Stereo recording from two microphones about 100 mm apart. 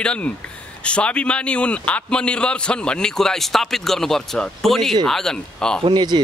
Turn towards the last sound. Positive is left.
turn(degrees=-50)  # may be behind; listen again after turning